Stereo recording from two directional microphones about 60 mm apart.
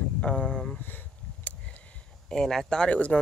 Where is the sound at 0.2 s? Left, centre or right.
Centre.